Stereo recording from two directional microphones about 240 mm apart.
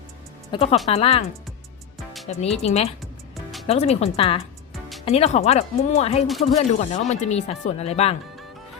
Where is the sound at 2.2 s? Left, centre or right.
Left.